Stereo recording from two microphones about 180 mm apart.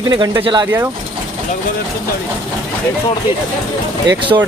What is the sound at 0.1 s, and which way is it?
Speech, 25° right (ahead or behind).